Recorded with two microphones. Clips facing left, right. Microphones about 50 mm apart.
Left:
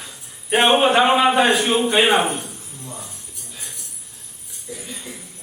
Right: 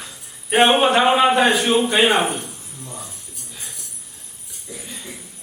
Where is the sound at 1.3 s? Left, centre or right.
Centre.